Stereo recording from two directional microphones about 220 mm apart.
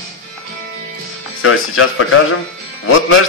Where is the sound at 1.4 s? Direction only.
70° left (ahead or behind).